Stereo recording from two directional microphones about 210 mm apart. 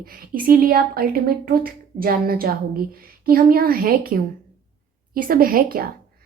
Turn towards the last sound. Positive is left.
turn(degrees=-45)  # may be behind; listen again after turning